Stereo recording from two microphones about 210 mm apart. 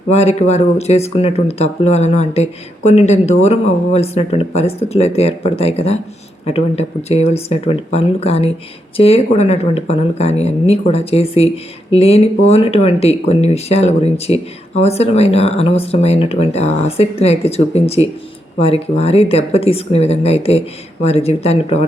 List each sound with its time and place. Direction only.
0.1 s speech: 30° left (ahead or behind)